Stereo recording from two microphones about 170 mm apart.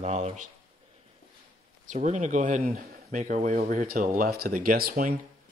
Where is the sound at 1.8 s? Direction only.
45° right (ahead or behind).